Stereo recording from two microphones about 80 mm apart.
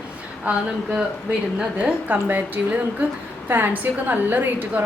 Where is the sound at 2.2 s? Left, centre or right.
Right.